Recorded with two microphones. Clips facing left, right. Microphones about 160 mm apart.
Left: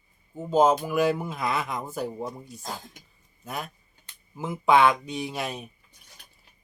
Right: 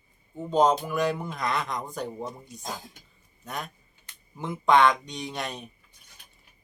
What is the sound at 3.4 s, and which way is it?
Speech, 5° left (ahead or behind).